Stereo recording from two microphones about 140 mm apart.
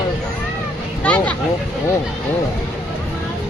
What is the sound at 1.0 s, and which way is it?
Speech, 10° left (ahead or behind).